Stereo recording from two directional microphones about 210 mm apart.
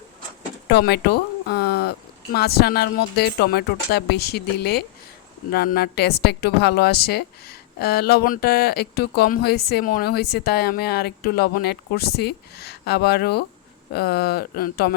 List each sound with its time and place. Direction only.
0.7 s a woman's voice: 50° left (ahead or behind)